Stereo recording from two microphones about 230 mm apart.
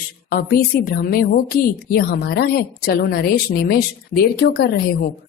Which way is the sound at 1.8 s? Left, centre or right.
Left.